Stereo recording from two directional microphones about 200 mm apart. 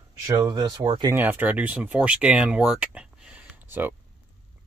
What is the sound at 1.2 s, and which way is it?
Speech, 10° right (ahead or behind).